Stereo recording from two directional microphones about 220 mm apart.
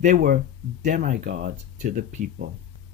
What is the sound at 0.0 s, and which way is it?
Speech, 40° right (ahead or behind).